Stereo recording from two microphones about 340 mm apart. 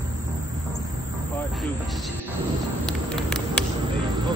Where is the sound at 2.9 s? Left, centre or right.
Centre.